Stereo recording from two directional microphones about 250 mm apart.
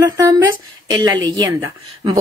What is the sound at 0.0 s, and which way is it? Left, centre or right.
A woman's voice, centre.